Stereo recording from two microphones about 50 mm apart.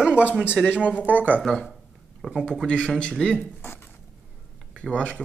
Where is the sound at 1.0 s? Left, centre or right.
Right.